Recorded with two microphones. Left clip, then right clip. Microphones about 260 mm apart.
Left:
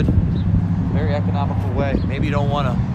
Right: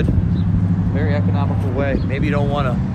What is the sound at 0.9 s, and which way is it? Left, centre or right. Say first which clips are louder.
Speech: even; centre.